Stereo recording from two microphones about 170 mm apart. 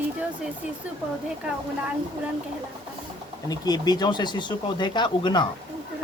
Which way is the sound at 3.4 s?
25° left (ahead or behind).